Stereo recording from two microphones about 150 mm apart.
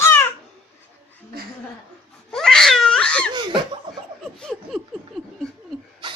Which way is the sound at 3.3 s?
30° right (ahead or behind).